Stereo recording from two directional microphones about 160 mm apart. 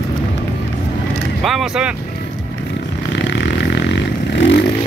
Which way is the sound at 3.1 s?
90° left.